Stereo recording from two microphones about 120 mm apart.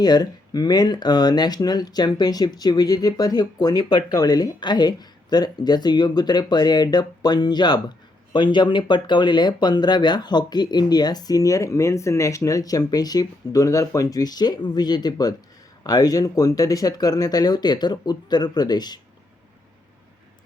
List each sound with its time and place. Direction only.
0.0 s speech: 35° left (ahead or behind)